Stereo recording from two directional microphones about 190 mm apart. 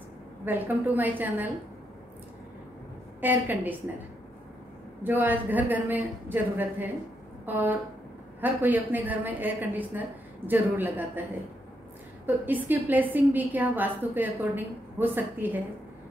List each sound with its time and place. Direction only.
0.5 s a woman's voice: 10° right (ahead or behind)
3.2 s a woman's voice: 10° right (ahead or behind)
5.0 s a woman's voice: 10° right (ahead or behind)
12.3 s a woman's voice: 10° right (ahead or behind)